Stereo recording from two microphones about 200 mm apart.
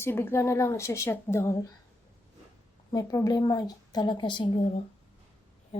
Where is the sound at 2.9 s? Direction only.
15° left (ahead or behind).